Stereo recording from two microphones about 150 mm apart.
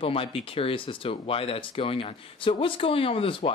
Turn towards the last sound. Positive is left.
turn(degrees=35)  # may be behind; listen again after turning